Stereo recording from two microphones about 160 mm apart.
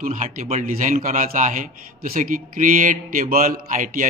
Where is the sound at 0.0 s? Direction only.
50° right (ahead or behind).